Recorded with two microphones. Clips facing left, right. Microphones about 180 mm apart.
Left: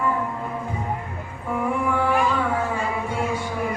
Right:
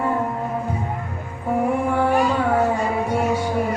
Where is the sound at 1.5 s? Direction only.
40° right (ahead or behind).